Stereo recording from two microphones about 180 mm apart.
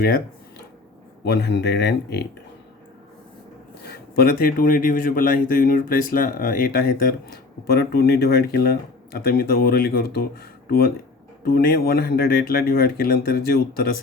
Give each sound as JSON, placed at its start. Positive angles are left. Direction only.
{"t": 1.2, "sound": "speech", "side_deg": 65}
{"t": 3.8, "sound": "speech", "side_deg": 60}